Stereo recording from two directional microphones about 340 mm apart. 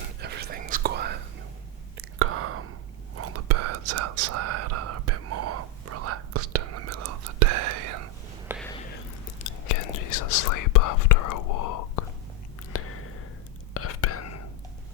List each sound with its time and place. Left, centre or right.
0.2 s whispering: right
9.6 s whispering: left
12.7 s a sound: left
13.7 s whispering: left